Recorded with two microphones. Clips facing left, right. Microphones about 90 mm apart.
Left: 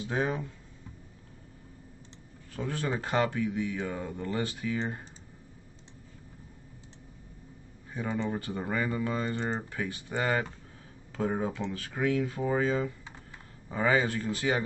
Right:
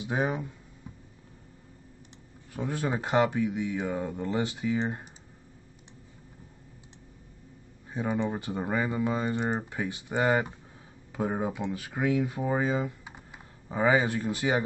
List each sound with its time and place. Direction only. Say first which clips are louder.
0.0 s speech: right 1 dB; 15° right (ahead or behind)
2.5 s speech: right 2 dB; 15° right (ahead or behind)
7.9 s speech: right 3 dB; 20° right (ahead or behind)